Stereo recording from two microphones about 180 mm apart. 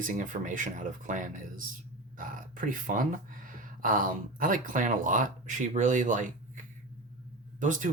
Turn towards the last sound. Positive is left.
turn(degrees=-45)  # may be behind; listen again after turning